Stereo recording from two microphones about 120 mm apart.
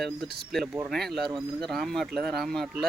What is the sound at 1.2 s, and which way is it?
Speech, 40° right (ahead or behind).